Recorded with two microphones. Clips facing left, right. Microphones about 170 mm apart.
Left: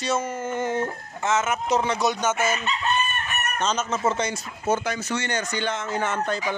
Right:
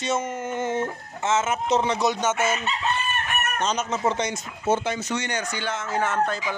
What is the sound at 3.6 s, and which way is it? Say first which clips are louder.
Speech: left 2 dB; 15° right (ahead or behind).